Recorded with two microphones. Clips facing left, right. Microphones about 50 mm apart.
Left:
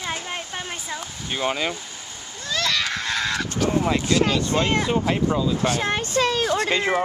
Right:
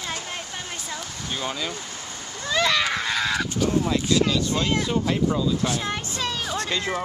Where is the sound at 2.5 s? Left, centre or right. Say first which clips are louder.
Right 2 dB; centre.